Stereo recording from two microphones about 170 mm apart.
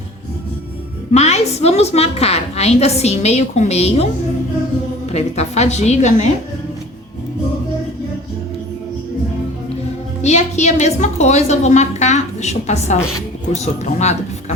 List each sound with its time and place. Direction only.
1.1 s a woman's voice: 40° left (ahead or behind)
10.2 s a woman's voice: 40° left (ahead or behind)